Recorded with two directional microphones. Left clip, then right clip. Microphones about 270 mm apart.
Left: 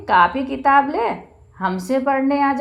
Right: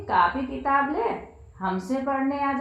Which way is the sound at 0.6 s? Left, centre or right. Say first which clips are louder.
Left 8 dB; left.